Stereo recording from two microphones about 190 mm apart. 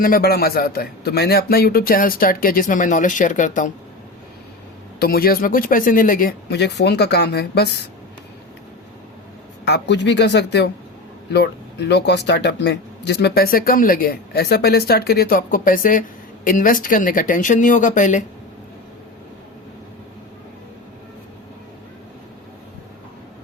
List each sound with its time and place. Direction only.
0.0 s speech: 50° left (ahead or behind)
4.9 s speech: 50° left (ahead or behind)
9.6 s speech: 65° left (ahead or behind); by 18.2 s 40° left (ahead or behind)